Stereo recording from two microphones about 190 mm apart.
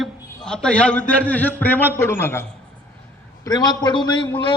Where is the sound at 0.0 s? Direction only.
5° left (ahead or behind).